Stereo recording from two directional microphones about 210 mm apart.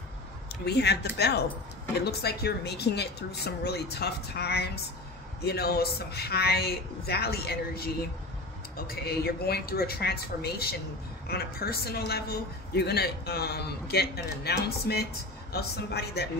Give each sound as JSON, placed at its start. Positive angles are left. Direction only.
{"t": 0.7, "sound": "a man's voice", "side_deg": 50}